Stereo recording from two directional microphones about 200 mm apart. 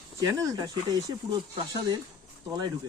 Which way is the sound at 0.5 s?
20° right (ahead or behind).